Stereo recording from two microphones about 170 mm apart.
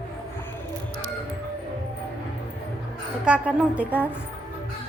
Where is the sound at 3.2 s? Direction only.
5° right (ahead or behind).